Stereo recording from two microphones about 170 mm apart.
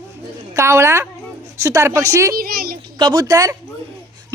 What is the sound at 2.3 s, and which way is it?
Speech, 60° right (ahead or behind).